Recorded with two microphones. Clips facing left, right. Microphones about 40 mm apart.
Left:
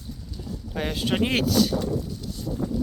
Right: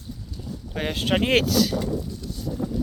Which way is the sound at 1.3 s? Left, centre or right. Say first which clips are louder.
Right 2 dB; right.